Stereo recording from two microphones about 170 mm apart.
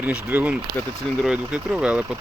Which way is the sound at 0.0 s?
10° right (ahead or behind).